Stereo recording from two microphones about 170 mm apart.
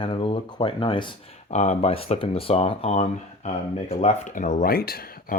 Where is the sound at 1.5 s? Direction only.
40° left (ahead or behind); by 5.3 s 60° left (ahead or behind).